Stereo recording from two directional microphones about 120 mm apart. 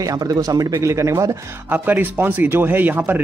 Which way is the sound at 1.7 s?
15° right (ahead or behind).